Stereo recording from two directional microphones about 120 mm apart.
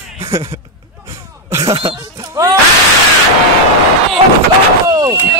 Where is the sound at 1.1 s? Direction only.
25° right (ahead or behind).